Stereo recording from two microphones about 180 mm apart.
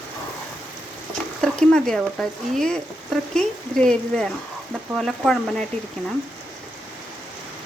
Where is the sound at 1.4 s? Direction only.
5° left (ahead or behind).